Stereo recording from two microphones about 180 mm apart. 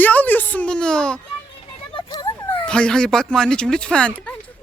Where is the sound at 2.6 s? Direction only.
5° left (ahead or behind).